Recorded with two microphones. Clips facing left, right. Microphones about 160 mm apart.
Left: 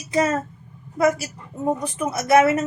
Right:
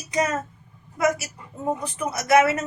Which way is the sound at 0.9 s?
30° left (ahead or behind).